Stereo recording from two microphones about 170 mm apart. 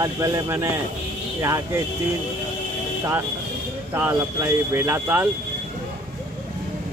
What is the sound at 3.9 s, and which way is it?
Speech, 15° right (ahead or behind).